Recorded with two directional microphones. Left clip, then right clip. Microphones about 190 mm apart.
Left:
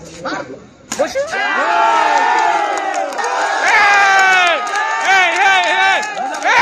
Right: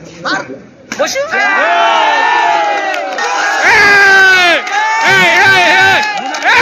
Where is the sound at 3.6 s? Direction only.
Centre (ahead or behind).